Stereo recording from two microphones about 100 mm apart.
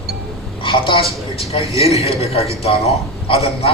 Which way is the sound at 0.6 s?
55° left (ahead or behind).